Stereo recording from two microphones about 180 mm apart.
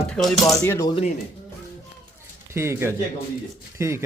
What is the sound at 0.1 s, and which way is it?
Speech, centre (ahead or behind).